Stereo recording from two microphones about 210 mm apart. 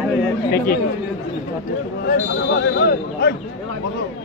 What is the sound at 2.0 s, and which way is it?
Speech, 55° left (ahead or behind).